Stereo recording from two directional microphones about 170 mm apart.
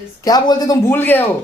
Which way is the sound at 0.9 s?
10° left (ahead or behind).